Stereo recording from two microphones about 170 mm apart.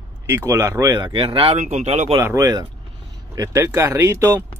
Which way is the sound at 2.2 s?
20° right (ahead or behind).